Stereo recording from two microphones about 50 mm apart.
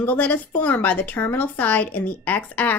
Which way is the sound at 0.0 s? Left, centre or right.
Left.